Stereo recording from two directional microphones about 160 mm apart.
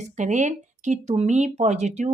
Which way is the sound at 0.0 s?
45° right (ahead or behind).